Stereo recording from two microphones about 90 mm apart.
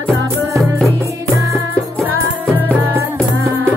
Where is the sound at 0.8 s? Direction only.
35° right (ahead or behind).